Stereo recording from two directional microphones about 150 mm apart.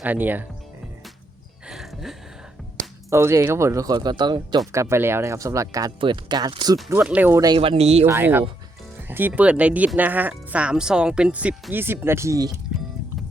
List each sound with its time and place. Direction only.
0.0 s speech: 10° right (ahead or behind)
1.6 s a sound: centre (ahead or behind)
3.1 s speech: 20° right (ahead or behind)
4.7 s speech: 20° right (ahead or behind)
6.0 s speech: 30° right (ahead or behind)
6.9 s speech: 10° right (ahead or behind)
7.4 s speech: 35° right (ahead or behind)
8.0 s speech: 15° right (ahead or behind)